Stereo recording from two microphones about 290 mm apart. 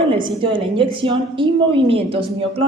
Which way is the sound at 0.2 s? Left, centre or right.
Centre.